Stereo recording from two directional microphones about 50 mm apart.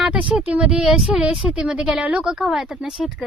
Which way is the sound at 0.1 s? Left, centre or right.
Right.